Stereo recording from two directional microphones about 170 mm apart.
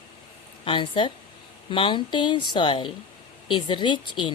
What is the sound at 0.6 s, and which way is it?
A woman's voice, 30° left (ahead or behind).